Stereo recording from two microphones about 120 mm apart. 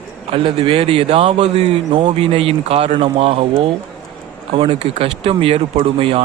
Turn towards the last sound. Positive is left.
turn(degrees=-50)  # may be behind; listen again after turning